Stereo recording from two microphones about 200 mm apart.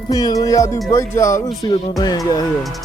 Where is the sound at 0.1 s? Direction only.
20° left (ahead or behind).